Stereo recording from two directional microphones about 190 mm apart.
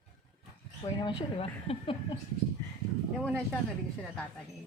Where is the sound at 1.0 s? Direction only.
30° left (ahead or behind).